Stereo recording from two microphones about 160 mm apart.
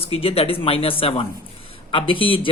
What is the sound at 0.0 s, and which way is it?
Speech, 35° left (ahead or behind).